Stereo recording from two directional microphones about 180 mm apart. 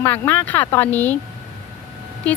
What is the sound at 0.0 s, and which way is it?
Speech, 10° left (ahead or behind).